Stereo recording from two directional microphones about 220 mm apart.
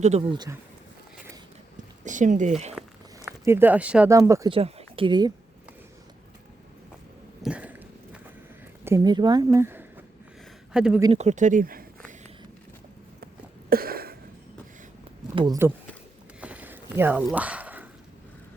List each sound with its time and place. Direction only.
0.0 s speech: 25° right (ahead or behind)
2.0 s speech: 35° right (ahead or behind)
3.4 s speech: 10° right (ahead or behind)
4.5 s a woman's voice: 25° right (ahead or behind)
7.4 s walk: 5° right (ahead or behind)
8.8 s speech: 15° right (ahead or behind)
11.0 s speech: 30° right (ahead or behind)
13.7 s a sound: 40° right (ahead or behind)
15.4 s speech: 15° right (ahead or behind)
16.4 s a sound: 5° right (ahead or behind)